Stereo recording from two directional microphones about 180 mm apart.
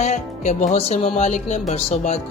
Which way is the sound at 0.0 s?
40° left (ahead or behind).